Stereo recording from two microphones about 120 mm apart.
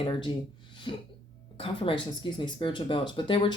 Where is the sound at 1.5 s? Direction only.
50° left (ahead or behind).